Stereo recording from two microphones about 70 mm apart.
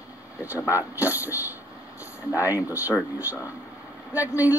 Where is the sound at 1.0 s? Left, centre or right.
Right.